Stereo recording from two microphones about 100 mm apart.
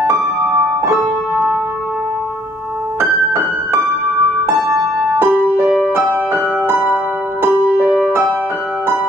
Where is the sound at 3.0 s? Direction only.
25° right (ahead or behind).